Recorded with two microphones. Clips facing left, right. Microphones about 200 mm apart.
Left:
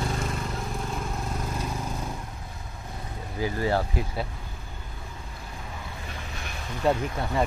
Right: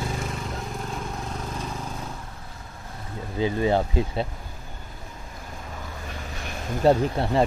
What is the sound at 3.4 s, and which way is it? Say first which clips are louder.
Speech: right 4 dB; 20° right (ahead or behind).